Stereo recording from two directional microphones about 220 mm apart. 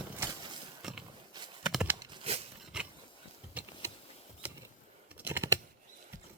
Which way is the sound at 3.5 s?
10° right (ahead or behind).